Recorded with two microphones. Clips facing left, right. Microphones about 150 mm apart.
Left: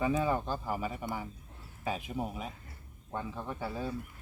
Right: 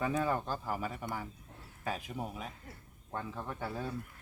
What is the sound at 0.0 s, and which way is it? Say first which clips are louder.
Speech: left 2 dB; 10° left (ahead or behind).